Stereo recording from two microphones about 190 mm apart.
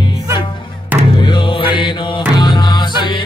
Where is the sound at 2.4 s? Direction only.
25° left (ahead or behind).